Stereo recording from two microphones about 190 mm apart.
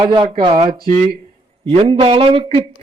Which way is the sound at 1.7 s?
30° right (ahead or behind).